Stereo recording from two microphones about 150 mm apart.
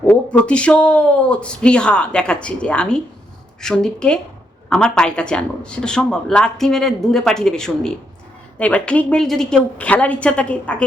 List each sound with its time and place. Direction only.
0.1 s speech: 10° left (ahead or behind)